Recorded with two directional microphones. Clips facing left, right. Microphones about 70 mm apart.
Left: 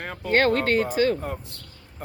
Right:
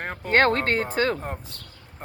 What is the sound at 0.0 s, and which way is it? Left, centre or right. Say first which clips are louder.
Speech: right 1 dB; right.